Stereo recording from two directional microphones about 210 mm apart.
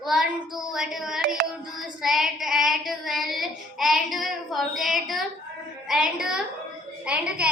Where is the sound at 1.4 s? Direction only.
50° right (ahead or behind).